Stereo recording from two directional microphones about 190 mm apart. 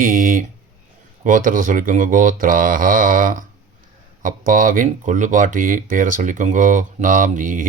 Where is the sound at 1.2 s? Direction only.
45° right (ahead or behind).